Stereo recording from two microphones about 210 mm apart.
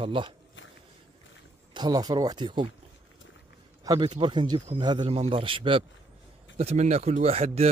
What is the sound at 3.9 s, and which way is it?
Speech, 20° right (ahead or behind).